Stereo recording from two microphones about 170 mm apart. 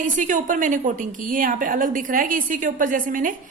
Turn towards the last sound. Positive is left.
turn(degrees=-50)  # may be behind; listen again after turning